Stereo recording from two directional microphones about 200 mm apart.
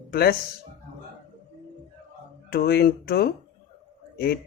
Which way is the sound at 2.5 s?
50° left (ahead or behind).